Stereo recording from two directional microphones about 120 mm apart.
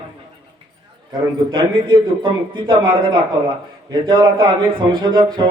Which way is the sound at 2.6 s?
40° right (ahead or behind).